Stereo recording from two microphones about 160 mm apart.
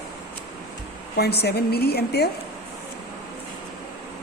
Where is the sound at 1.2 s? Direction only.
90° left.